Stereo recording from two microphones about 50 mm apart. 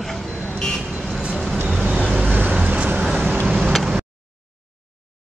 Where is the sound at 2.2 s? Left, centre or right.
Right.